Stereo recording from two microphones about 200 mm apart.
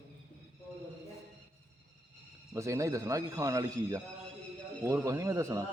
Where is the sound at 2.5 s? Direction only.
15° right (ahead or behind).